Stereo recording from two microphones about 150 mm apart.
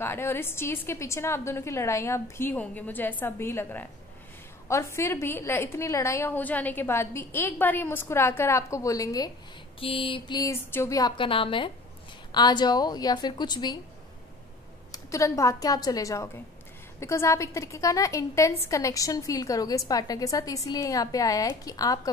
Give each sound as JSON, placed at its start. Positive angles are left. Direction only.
{"t": 0.0, "sound": "a woman's voice", "side_deg": 15}
{"t": 9.8, "sound": "a woman's voice", "side_deg": 40}
{"t": 10.5, "sound": "a woman's voice", "side_deg": 15}
{"t": 14.9, "sound": "a woman's voice", "side_deg": 20}